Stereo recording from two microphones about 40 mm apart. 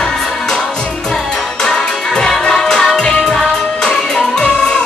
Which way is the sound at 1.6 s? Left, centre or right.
Centre.